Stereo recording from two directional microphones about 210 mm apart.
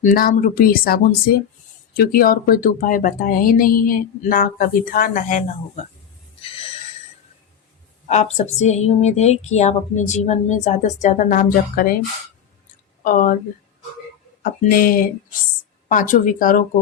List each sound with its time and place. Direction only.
0.0 s a woman's voice: 40° left (ahead or behind)
8.0 s a woman's voice: 30° left (ahead or behind)
13.1 s a woman's voice: 40° left (ahead or behind)
14.4 s a woman's voice: 40° left (ahead or behind)